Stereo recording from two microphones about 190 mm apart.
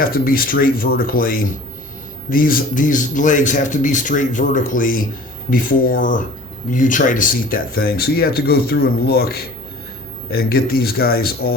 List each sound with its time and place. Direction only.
0.0 s speech: 50° left (ahead or behind)